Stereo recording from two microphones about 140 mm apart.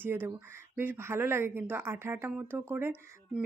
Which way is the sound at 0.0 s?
15° right (ahead or behind).